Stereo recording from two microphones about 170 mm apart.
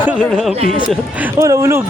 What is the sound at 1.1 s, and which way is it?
Speech, 15° right (ahead or behind).